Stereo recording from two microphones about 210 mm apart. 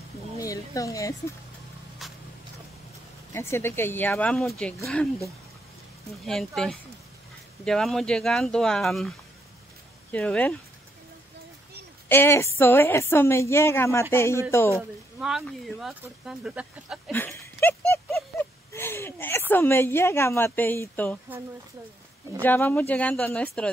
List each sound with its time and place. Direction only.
0.4 s speech: 15° left (ahead or behind)
3.3 s a woman's voice: 10° left (ahead or behind)
6.2 s speech: centre (ahead or behind)
10.1 s a woman's voice: 5° left (ahead or behind)
12.1 s a woman's voice: 10° left (ahead or behind)
14.8 s speech: centre (ahead or behind)
17.1 s a sound: 10° left (ahead or behind)
22.4 s a woman's voice: 10° left (ahead or behind)